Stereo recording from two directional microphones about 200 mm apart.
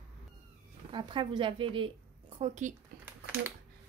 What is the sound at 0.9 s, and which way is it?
A woman's voice, 25° right (ahead or behind).